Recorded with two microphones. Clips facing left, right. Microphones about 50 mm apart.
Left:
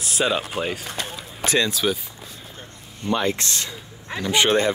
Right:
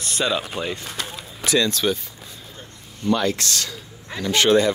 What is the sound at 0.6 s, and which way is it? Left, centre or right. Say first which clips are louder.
Speech: left 1 dB; left.